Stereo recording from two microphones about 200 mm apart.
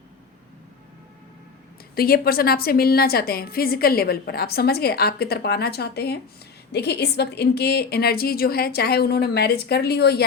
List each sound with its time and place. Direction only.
2.0 s a woman's voice: 50° left (ahead or behind)